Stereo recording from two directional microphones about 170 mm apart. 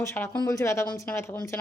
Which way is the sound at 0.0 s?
15° left (ahead or behind).